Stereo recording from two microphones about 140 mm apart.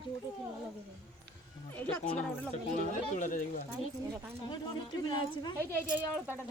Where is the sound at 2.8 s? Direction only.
65° left (ahead or behind).